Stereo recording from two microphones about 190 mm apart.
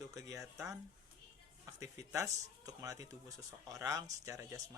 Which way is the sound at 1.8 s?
15° right (ahead or behind).